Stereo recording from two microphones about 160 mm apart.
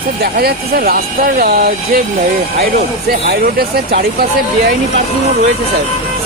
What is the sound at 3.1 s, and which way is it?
Speech, 70° right (ahead or behind).